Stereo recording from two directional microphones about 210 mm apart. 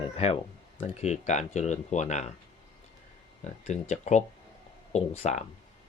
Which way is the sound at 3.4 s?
35° left (ahead or behind).